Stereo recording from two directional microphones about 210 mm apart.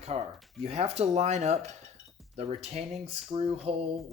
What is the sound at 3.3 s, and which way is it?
Cutlery, 25° right (ahead or behind).